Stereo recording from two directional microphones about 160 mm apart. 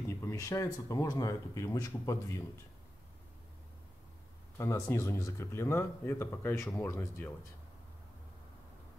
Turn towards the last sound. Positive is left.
turn(degrees=15)  # may be behind; listen again after turning